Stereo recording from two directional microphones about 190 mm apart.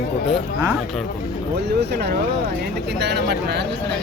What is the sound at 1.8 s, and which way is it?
Speech, 60° right (ahead or behind).